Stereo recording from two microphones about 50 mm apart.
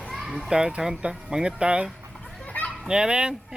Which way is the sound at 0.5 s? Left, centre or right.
Centre.